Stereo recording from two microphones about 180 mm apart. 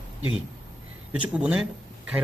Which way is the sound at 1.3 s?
5° right (ahead or behind).